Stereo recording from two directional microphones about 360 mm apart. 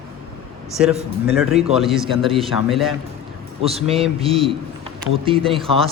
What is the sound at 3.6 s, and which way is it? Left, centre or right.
A man's voice, centre.